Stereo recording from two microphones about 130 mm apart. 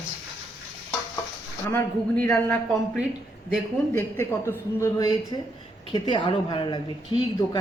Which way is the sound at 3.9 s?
15° left (ahead or behind).